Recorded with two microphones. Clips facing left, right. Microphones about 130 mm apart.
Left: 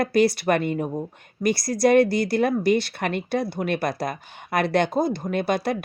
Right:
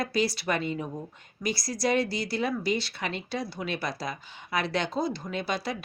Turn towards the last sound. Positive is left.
turn(degrees=55)  # may be behind; listen again after turning